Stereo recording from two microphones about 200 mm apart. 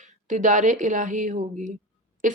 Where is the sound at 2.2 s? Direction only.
40° right (ahead or behind).